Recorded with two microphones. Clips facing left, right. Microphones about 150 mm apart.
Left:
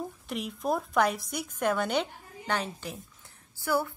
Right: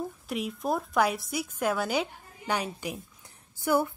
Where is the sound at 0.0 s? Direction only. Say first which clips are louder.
Right 2 dB; centre (ahead or behind).